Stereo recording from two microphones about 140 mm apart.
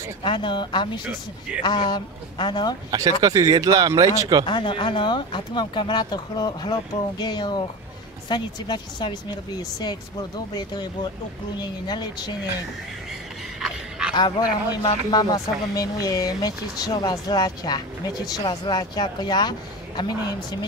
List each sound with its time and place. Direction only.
0.2 s speech: 35° left (ahead or behind)
2.9 s speech: 25° right (ahead or behind)
4.5 s speech: 35° left (ahead or behind)
10.5 s speech: 30° left (ahead or behind)
13.6 s a sound: 5° right (ahead or behind)
14.1 s speech: 30° left (ahead or behind)